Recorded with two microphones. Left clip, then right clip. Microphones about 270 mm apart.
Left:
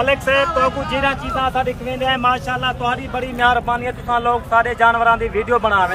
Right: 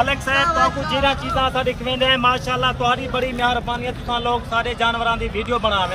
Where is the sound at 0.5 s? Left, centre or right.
Left.